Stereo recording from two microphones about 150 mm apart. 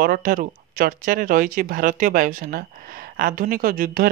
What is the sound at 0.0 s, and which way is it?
Speech, 80° right.